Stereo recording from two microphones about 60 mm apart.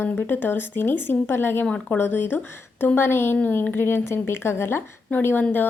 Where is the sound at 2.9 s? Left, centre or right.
Left.